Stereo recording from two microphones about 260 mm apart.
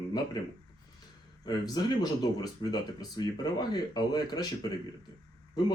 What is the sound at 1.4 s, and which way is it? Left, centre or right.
Speech, centre.